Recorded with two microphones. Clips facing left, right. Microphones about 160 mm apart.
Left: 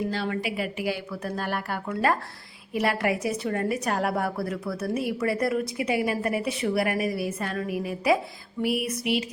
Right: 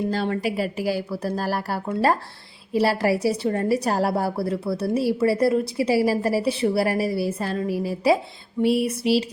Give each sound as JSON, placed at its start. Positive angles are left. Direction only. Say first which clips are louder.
{"t": 0.1, "sound": "a woman's voice", "louder": "right 5 dB", "side_deg": -40}
{"t": 8.6, "sound": "music", "louder": "right 6 dB", "side_deg": -30}